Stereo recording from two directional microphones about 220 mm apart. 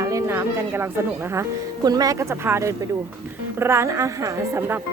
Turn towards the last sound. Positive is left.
turn(degrees=-10)  # may be behind; listen again after turning